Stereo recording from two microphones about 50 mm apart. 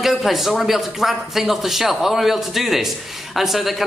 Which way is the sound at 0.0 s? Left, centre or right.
Centre.